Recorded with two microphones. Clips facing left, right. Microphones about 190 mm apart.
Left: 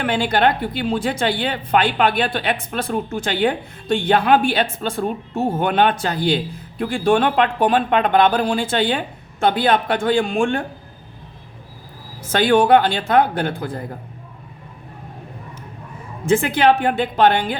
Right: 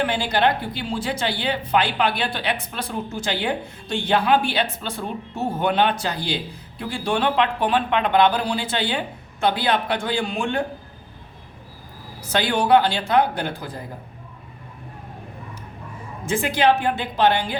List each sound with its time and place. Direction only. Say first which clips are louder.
0.0 s speech: left 3 dB; 55° left (ahead or behind)
12.2 s speech: left 7 dB; 50° left (ahead or behind)
16.2 s a woman's voice: left 4 dB; 55° left (ahead or behind)